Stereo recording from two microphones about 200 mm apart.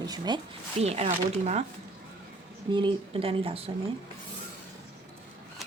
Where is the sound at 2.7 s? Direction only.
25° right (ahead or behind).